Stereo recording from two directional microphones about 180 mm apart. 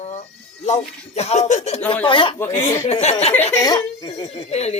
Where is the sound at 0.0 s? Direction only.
40° left (ahead or behind).